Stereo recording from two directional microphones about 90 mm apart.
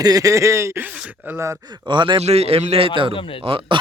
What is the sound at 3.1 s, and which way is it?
Speech, 75° left (ahead or behind).